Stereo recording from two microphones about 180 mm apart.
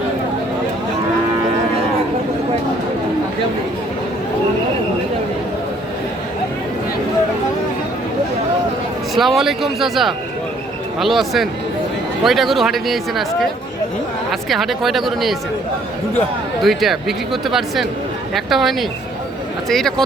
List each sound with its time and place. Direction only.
9.1 s speech: centre (ahead or behind)
14.5 s speech: centre (ahead or behind)
16.6 s speech: centre (ahead or behind)